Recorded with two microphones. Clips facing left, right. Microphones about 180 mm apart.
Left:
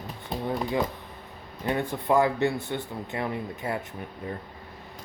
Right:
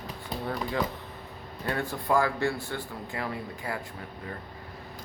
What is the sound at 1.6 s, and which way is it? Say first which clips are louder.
Speech: left 3 dB; 20° left (ahead or behind).